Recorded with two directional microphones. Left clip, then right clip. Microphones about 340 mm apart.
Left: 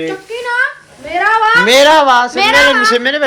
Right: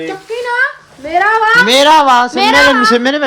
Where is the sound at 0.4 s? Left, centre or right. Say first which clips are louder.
Right 1 dB; right.